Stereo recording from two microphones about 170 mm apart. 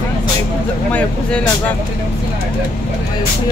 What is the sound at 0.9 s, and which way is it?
Speech, 10° left (ahead or behind).